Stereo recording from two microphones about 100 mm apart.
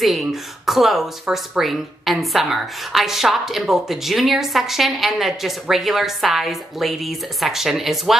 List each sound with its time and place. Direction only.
0.0 s speech: centre (ahead or behind)